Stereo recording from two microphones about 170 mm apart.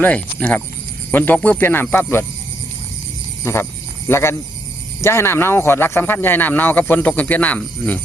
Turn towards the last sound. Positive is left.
turn(degrees=10)  # may be behind; listen again after turning